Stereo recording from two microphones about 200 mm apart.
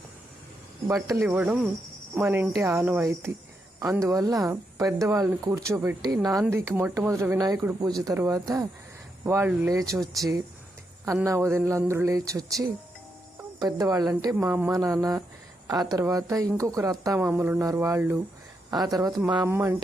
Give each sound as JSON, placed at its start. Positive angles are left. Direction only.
{"t": 1.0, "sound": "speech", "side_deg": -15}
{"t": 11.0, "sound": "a woman's voice", "side_deg": -15}